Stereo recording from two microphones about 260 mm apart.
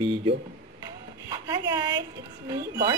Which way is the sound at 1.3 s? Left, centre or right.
Centre.